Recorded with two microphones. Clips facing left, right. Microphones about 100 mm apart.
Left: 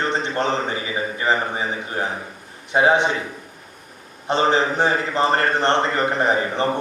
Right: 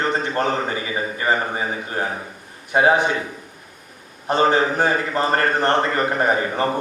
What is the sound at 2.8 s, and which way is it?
Speech, 30° left (ahead or behind).